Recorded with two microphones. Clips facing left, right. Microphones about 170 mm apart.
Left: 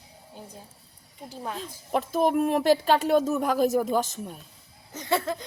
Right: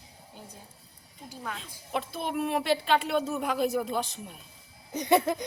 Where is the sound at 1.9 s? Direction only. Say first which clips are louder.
Left 8 dB; 40° left (ahead or behind).